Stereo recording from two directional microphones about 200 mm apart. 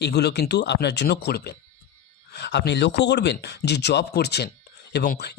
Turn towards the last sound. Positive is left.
turn(degrees=55)  # may be behind; listen again after turning